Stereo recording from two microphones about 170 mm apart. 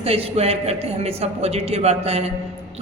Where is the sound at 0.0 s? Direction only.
35° right (ahead or behind).